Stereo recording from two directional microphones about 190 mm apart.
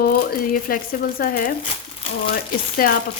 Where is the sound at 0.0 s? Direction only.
50° left (ahead or behind).